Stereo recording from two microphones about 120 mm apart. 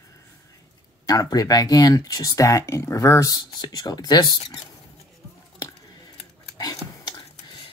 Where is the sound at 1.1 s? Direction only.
30° left (ahead or behind).